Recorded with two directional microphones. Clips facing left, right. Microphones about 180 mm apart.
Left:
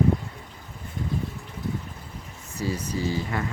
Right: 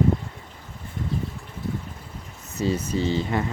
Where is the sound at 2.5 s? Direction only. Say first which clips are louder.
Right 4 dB; 25° right (ahead or behind).